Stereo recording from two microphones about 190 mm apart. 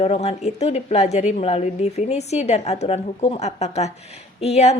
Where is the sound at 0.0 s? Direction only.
35° left (ahead or behind).